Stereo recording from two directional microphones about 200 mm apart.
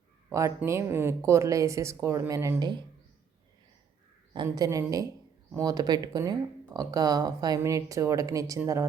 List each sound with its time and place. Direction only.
0.3 s speech: 15° right (ahead or behind)
4.4 s speech: 20° right (ahead or behind)